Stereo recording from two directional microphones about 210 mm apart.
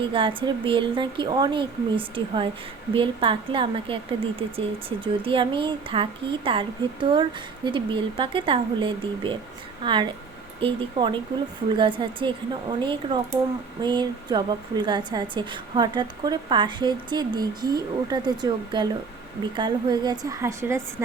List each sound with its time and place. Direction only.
0.0 s a woman's voice: 25° right (ahead or behind)